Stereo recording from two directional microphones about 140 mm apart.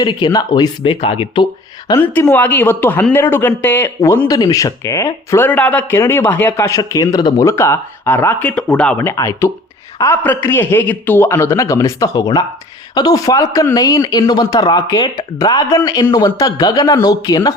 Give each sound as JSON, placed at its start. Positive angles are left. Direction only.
{"t": 0.0, "sound": "speech", "side_deg": 30}
{"t": 1.9, "sound": "a man's voice", "side_deg": 15}